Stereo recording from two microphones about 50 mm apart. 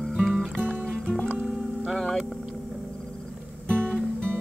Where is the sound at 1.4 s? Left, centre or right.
Centre.